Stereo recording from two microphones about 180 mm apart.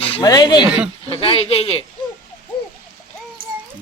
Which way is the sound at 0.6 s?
5° right (ahead or behind).